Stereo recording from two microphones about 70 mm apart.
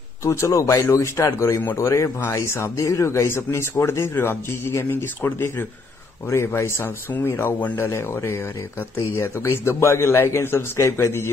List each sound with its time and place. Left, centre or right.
0.2 s speech: left
1.8 s speech: left